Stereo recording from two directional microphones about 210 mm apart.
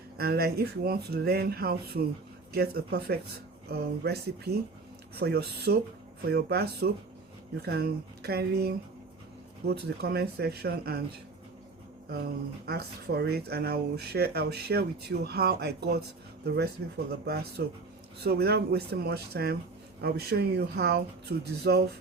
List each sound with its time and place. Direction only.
0.2 s speech: 45° right (ahead or behind)
12.6 s speech: 50° right (ahead or behind)
17.1 s speech: 50° right (ahead or behind)